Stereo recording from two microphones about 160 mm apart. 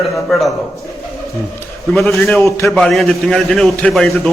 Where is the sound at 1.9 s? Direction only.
5° left (ahead or behind).